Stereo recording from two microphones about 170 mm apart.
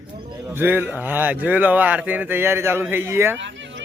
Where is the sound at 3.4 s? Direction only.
90° right.